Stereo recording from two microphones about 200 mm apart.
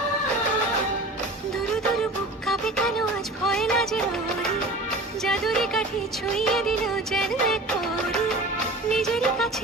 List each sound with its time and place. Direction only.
2.5 s music: 5° left (ahead or behind)
5.2 s music: 5° left (ahead or behind)
6.3 s music of bollywood: centre (ahead or behind)
8.9 s music: centre (ahead or behind)